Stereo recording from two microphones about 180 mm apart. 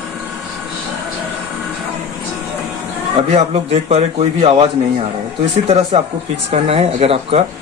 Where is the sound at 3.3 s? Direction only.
35° right (ahead or behind).